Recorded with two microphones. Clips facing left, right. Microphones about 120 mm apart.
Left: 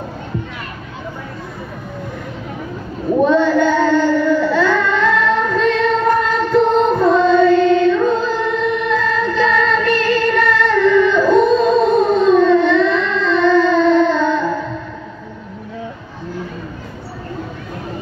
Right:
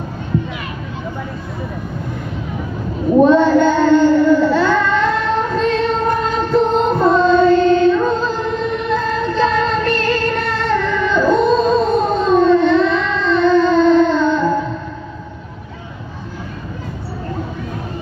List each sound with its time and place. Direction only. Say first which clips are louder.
3.2 s child singing: right 3 dB; 30° right (ahead or behind)